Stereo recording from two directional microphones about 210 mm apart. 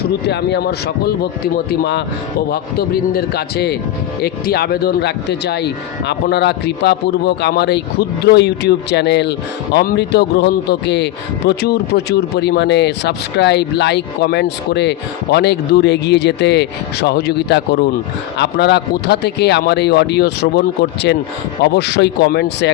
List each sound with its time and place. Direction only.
0.3 s a man's voice: 55° left (ahead or behind)